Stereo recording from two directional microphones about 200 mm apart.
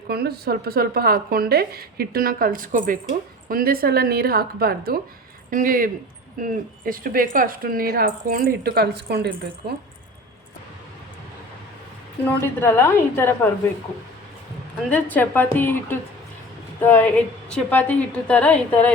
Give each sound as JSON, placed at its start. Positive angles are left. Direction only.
{"t": 0.1, "sound": "speech", "side_deg": -50}
{"t": 12.5, "sound": "a woman's voice", "side_deg": 10}
{"t": 14.8, "sound": "a woman's voice", "side_deg": 10}